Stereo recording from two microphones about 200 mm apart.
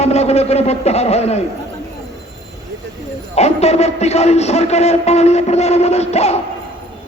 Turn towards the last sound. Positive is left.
turn(degrees=30)  # may be behind; listen again after turning